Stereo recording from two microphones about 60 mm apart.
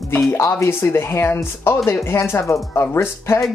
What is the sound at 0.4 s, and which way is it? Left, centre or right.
Speech, left.